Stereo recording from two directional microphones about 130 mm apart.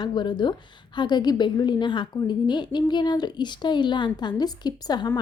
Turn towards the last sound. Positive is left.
turn(degrees=35)  # may be behind; listen again after turning